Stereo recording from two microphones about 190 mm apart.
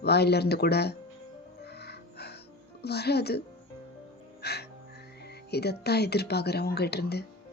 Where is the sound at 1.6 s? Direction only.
60° left (ahead or behind).